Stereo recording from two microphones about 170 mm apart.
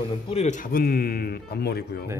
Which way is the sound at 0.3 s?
45° left (ahead or behind).